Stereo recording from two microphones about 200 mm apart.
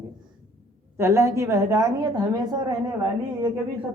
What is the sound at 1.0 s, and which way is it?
Speech, 15° right (ahead or behind).